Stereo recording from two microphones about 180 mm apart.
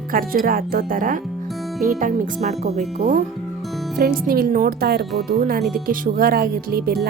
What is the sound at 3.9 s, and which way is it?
Speech, 55° right (ahead or behind).